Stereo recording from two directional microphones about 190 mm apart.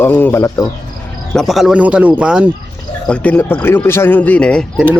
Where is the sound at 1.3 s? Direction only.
Centre (ahead or behind).